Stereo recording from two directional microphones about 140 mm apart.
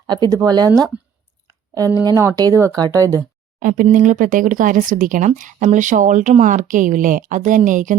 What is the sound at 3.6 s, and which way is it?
Speech, 80° right.